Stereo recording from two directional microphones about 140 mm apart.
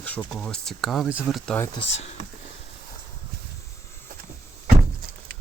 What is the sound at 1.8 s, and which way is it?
Speech, 50° left (ahead or behind).